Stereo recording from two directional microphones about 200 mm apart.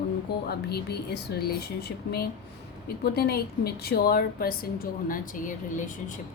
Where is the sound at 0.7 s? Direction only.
55° left (ahead or behind).